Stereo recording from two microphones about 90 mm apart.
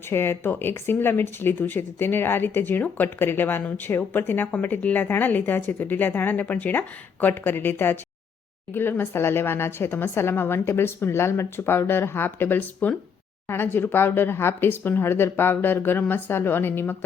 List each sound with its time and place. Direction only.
0.1 s speech: 25° left (ahead or behind)